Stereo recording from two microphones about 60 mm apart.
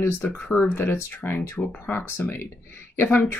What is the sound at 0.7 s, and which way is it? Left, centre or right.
Speech, left.